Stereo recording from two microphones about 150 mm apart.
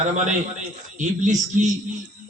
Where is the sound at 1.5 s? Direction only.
60° right (ahead or behind).